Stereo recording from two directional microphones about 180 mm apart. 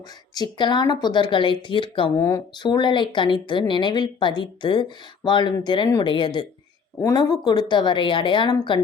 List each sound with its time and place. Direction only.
0.3 s speech: 25° left (ahead or behind)